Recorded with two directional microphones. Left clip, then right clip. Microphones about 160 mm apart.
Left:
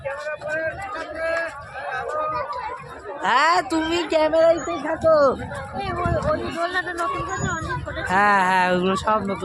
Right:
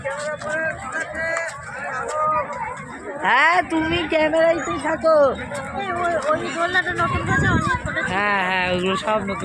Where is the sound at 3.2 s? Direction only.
10° left (ahead or behind).